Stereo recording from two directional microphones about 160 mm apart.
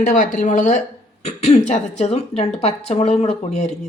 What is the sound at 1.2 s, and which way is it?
Speech, 40° left (ahead or behind).